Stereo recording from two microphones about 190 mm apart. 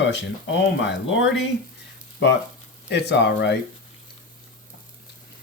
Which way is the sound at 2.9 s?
60° left (ahead or behind).